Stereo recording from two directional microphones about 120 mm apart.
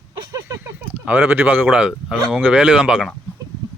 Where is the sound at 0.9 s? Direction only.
15° right (ahead or behind).